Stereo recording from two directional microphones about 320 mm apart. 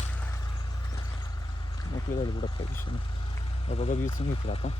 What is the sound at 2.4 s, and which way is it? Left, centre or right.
Speech, centre.